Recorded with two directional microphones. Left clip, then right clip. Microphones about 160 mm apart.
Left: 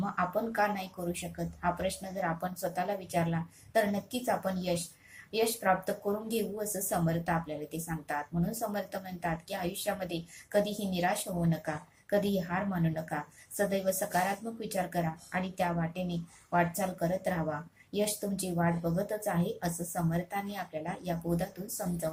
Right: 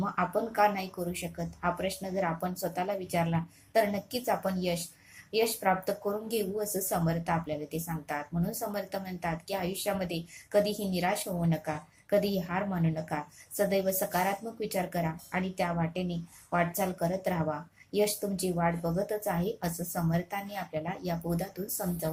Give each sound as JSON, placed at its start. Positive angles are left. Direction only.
{"t": 0.2, "sound": "a woman's voice", "side_deg": -20}